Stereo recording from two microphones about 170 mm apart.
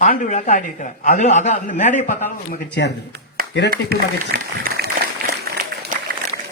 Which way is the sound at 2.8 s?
90° left.